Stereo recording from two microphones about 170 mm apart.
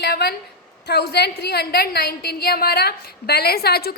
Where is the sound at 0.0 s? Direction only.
70° left (ahead or behind).